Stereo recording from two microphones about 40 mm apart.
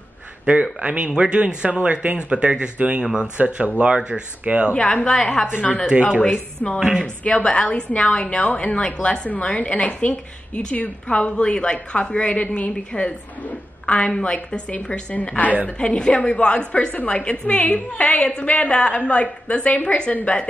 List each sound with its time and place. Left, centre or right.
0.5 s speech: right
3.3 s speech: right
4.7 s a woman's voice: left
6.8 s speech: centre
7.2 s a woman's voice: left
8.8 s a woman's voice: left
15.2 s a woman's voice: left
16.0 s a woman's voice: left